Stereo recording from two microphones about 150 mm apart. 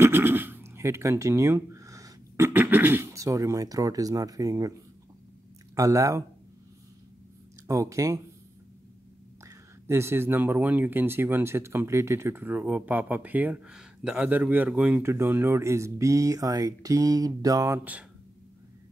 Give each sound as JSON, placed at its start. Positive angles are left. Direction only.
{"t": 0.0, "sound": "speech", "side_deg": -15}
{"t": 5.8, "sound": "speech", "side_deg": -20}
{"t": 7.6, "sound": "speech", "side_deg": -20}
{"t": 9.8, "sound": "speech", "side_deg": -15}